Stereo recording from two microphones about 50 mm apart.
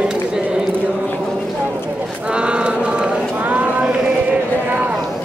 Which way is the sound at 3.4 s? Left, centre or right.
Right.